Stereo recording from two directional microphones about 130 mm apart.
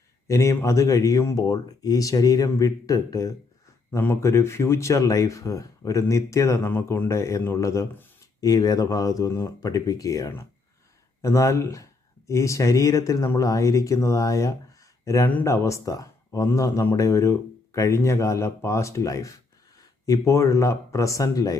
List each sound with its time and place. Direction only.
0.3 s speech: 25° left (ahead or behind)